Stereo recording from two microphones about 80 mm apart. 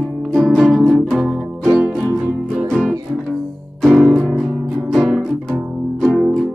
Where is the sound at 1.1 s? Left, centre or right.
Centre.